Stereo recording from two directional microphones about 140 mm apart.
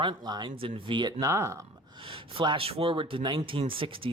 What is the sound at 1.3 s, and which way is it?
Speech, 20° right (ahead or behind).